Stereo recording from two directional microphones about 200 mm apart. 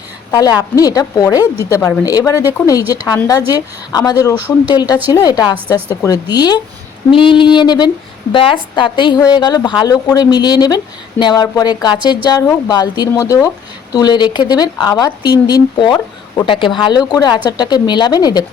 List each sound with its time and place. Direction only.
0.3 s a woman's voice: 20° left (ahead or behind)
4.4 s speech: 10° right (ahead or behind)
4.7 s a woman's voice: 20° left (ahead or behind)